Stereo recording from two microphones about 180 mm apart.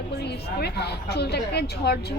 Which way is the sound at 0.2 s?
65° left (ahead or behind).